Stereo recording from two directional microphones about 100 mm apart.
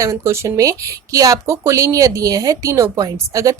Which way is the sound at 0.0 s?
30° right (ahead or behind).